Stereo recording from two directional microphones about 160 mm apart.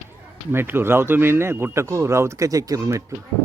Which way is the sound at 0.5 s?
15° right (ahead or behind).